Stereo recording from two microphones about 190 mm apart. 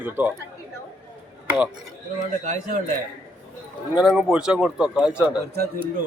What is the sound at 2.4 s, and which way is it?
Speech, 40° right (ahead or behind).